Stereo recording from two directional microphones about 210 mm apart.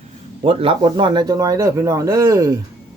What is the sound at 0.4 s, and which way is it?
Speech, 25° right (ahead or behind).